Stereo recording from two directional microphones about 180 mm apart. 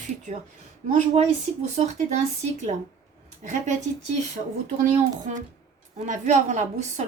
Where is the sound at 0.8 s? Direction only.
40° right (ahead or behind).